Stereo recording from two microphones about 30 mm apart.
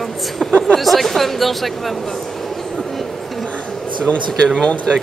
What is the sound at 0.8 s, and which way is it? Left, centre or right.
A man's voice, centre.